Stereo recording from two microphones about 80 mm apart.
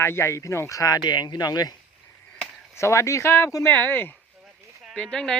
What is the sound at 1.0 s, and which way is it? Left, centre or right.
Speech, left.